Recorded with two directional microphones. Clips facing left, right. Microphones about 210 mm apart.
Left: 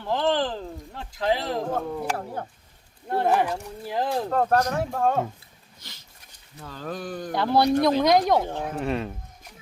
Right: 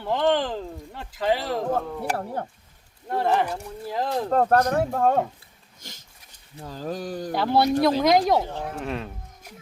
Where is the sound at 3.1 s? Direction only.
10° left (ahead or behind).